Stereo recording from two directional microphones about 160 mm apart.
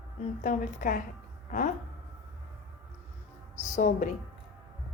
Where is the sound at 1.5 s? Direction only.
50° left (ahead or behind).